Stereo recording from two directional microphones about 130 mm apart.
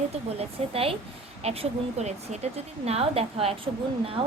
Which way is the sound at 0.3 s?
50° right (ahead or behind).